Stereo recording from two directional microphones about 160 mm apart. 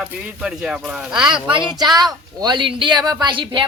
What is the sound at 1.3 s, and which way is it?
Speech, 30° right (ahead or behind).